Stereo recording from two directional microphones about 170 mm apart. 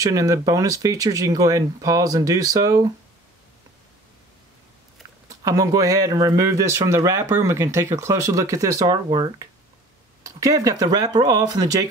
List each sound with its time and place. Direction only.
0.0 s speech: 20° right (ahead or behind)
5.3 s speech: 20° right (ahead or behind)